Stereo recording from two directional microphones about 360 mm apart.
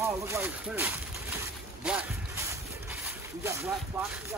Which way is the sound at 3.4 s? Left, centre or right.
Centre.